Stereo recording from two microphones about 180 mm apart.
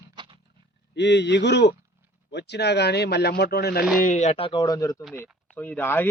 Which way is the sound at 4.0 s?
45° left (ahead or behind).